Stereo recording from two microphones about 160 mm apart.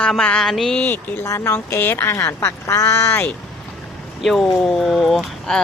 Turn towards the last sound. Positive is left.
turn(degrees=0)  # may be behind; listen again after turning